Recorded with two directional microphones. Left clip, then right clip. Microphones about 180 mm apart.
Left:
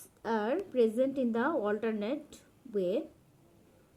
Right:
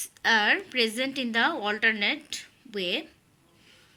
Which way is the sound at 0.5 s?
45° right (ahead or behind).